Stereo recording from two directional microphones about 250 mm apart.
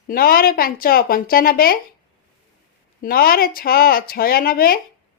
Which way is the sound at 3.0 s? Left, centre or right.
Left.